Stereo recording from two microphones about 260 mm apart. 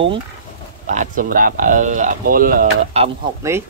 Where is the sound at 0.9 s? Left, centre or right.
Right.